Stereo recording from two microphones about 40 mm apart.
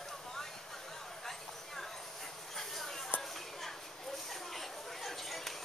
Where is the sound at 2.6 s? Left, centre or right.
Centre.